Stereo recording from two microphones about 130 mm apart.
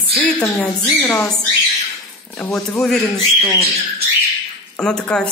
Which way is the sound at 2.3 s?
10° left (ahead or behind).